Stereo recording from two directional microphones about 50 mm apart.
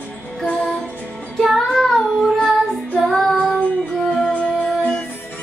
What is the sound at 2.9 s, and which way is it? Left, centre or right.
Female singing, centre.